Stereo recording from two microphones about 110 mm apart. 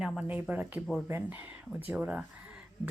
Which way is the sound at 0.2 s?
10° right (ahead or behind).